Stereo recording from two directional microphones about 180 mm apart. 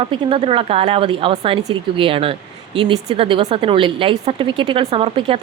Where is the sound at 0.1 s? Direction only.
30° right (ahead or behind).